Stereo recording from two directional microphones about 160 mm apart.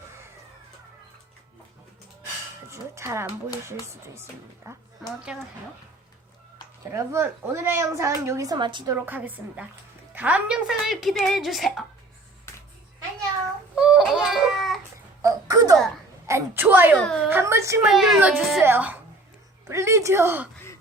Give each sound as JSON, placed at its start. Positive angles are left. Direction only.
{"t": 2.6, "sound": "speech", "side_deg": -15}
{"t": 4.7, "sound": "a woman's voice", "side_deg": -20}
{"t": 5.3, "sound": "a woman's voice", "side_deg": -5}
{"t": 6.9, "sound": "speech", "side_deg": -15}
{"t": 9.0, "sound": "a woman's voice", "side_deg": -10}
{"t": 13.7, "sound": "baby cry", "side_deg": -5}
{"t": 15.2, "sound": "babbling", "side_deg": -20}
{"t": 16.2, "sound": "a woman's voice", "side_deg": -15}
{"t": 17.8, "sound": "speech", "side_deg": 0}